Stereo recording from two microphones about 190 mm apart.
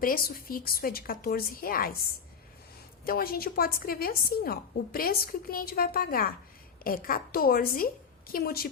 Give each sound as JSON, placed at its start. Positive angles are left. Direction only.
{"t": 0.0, "sound": "a woman's voice", "side_deg": 50}
{"t": 3.1, "sound": "a woman's voice", "side_deg": 50}